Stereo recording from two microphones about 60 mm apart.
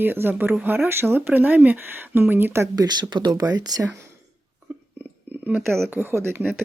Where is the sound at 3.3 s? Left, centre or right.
Right.